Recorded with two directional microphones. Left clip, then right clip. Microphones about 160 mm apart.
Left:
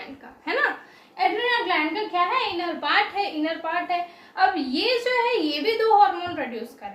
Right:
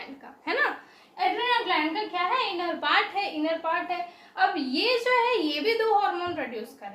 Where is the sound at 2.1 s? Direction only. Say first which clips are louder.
Left 5 dB; 10° right (ahead or behind).